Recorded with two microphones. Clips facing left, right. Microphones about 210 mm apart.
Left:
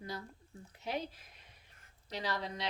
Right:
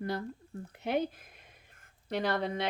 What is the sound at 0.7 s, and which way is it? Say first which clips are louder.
Speech: right 8 dB; 60° right (ahead or behind).